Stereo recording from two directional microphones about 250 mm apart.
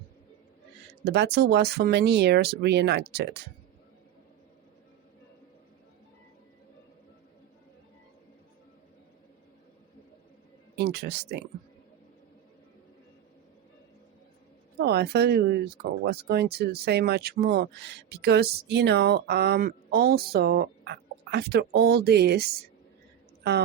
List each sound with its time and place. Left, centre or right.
1.0 s speech: right
10.8 s speech: right
14.8 s a woman's voice: right